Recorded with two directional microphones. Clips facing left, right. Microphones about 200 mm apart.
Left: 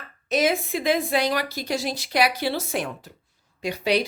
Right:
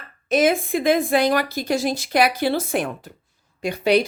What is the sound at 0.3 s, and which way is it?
A woman's voice, 50° right (ahead or behind).